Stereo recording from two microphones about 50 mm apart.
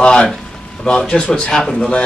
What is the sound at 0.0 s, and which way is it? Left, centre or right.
A man's voice, centre.